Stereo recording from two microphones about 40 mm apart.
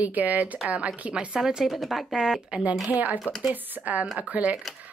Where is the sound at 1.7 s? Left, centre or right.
Centre.